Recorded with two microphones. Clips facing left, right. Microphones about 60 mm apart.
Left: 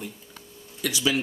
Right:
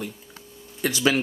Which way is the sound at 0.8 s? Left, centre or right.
Right.